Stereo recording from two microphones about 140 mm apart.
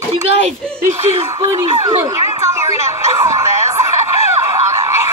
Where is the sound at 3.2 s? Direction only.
20° right (ahead or behind).